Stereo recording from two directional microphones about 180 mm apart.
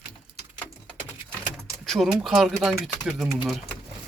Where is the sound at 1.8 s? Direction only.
Centre (ahead or behind).